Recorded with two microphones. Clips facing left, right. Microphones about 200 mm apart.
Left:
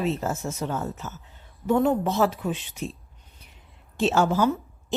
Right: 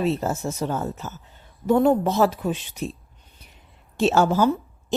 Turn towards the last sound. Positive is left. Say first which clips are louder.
# right 3 dB
turn(degrees=-35)  # may be behind; listen again after turning